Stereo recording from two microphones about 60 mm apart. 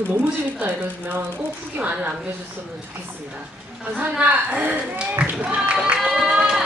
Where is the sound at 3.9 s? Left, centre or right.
Right.